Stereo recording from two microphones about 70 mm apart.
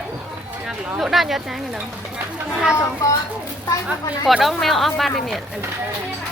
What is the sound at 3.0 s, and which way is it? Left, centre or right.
Speech, left.